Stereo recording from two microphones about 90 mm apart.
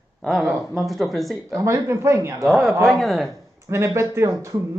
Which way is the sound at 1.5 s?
35° right (ahead or behind).